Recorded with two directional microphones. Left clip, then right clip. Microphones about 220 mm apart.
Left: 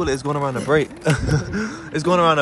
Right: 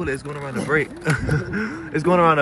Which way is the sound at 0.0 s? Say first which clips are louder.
Left 6 dB; 15° left (ahead or behind).